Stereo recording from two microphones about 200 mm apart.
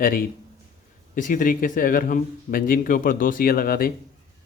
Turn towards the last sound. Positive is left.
turn(degrees=45)  # may be behind; listen again after turning